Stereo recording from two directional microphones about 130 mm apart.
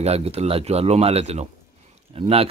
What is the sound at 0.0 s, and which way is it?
A man's voice, 55° right (ahead or behind).